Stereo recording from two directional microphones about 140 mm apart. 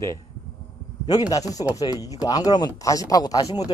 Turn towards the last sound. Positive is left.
turn(degrees=30)  # may be behind; listen again after turning